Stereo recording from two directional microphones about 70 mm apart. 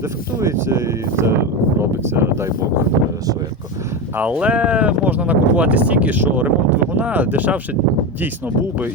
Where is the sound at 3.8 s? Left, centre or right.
Right.